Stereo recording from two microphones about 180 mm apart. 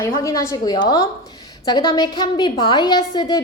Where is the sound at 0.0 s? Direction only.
15° left (ahead or behind).